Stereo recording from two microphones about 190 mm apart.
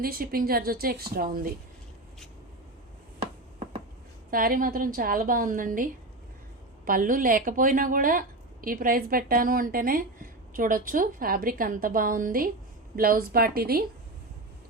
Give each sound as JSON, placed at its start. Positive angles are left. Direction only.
{"t": 0.0, "sound": "a woman's voice", "side_deg": -50}
{"t": 4.3, "sound": "a woman's voice", "side_deg": -50}